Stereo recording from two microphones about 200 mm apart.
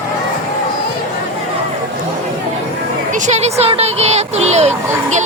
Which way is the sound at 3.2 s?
35° right (ahead or behind).